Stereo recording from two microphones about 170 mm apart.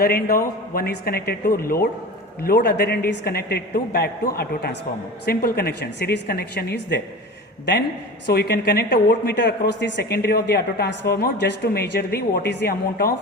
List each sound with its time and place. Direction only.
0.0 s a man's voice: 60° left (ahead or behind)
7.6 s a woman's voice: 90° left
8.3 s speech: 70° left (ahead or behind)